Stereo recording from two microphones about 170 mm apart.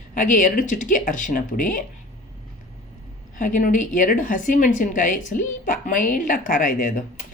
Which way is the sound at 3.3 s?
50° left (ahead or behind).